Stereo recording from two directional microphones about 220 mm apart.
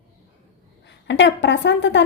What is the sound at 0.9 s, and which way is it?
A woman's voice, 55° left (ahead or behind).